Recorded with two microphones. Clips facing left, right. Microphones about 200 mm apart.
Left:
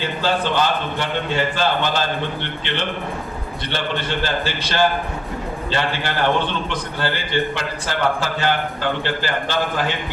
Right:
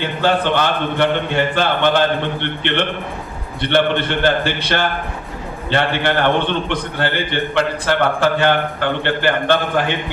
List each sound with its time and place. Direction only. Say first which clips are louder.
0.0 s a man's voice: right 4 dB; 60° right (ahead or behind)